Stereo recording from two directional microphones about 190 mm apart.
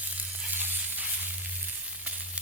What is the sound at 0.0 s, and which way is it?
Sizzle, 10° right (ahead or behind).